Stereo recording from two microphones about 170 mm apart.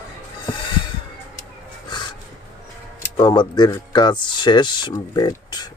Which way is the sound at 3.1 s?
25° left (ahead or behind).